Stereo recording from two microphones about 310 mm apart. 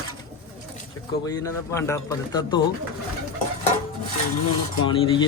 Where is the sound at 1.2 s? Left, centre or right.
Centre.